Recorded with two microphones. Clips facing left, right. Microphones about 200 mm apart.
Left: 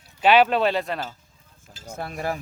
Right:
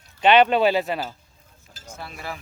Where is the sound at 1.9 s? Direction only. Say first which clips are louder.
Left 6 dB; 50° left (ahead or behind).